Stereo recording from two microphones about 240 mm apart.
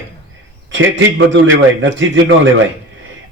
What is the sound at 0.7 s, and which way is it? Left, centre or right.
A man's voice, right.